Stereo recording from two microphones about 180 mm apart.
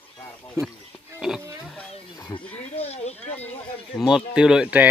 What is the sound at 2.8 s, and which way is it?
Speech, 35° left (ahead or behind).